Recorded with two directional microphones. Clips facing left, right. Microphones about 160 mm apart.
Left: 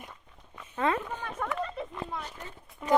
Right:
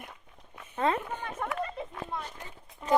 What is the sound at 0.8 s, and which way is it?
Speech, 35° right (ahead or behind).